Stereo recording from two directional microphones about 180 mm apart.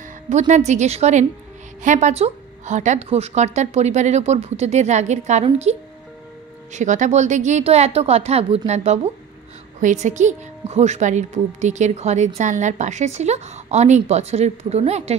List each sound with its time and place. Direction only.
0.3 s a woman's voice: 40° right (ahead or behind)